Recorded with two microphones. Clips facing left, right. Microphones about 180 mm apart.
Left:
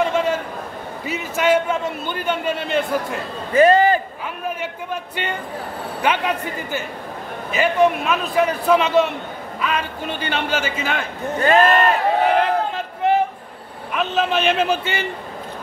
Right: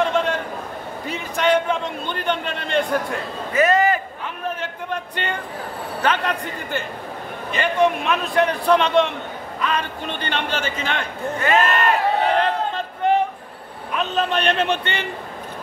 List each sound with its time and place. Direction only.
0.0 s a sound: 5° left (ahead or behind)
1.0 s a man's voice: 5° left (ahead or behind)
3.5 s a man's voice: 30° left (ahead or behind)
5.1 s a man's voice: 5° left (ahead or behind)
11.3 s speech: 35° left (ahead or behind)
12.4 s a sound: 5° left (ahead or behind)
13.9 s a man's voice: 5° left (ahead or behind)